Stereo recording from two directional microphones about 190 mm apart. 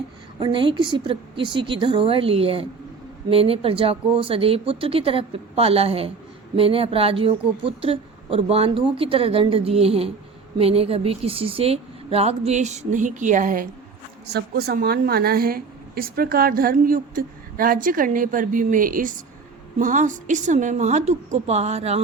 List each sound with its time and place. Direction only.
0.3 s a woman's voice: 25° right (ahead or behind)